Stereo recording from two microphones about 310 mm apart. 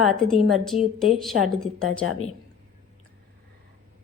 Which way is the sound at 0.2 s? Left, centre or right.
Centre.